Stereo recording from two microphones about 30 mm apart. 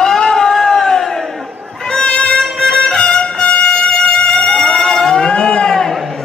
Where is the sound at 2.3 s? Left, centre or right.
Left.